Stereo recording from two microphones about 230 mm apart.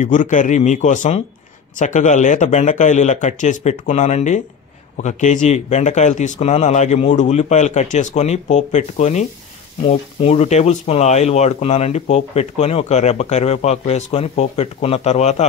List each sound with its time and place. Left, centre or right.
0.0 s speech: left